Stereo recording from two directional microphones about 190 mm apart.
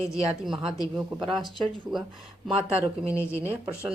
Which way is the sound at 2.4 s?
5° right (ahead or behind).